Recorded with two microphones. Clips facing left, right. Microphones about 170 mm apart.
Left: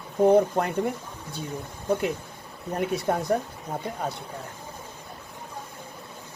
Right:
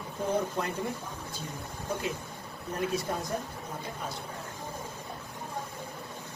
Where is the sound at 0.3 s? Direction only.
60° left (ahead or behind).